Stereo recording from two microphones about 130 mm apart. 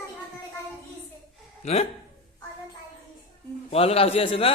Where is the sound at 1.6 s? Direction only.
55° left (ahead or behind).